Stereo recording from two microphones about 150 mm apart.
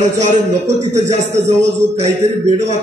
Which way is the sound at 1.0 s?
50° right (ahead or behind).